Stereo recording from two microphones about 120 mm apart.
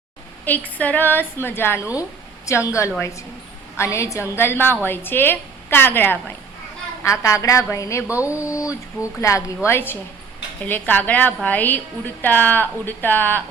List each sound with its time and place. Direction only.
0.4 s a woman's voice: 15° left (ahead or behind)